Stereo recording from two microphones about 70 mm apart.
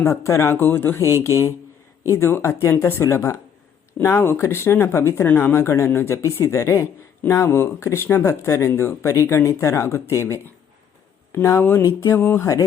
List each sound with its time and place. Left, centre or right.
0.1 s speech: left
1.0 s speech: left
6.4 s speech: left
11.6 s speech: left
12.1 s speech: left
12.4 s speech: left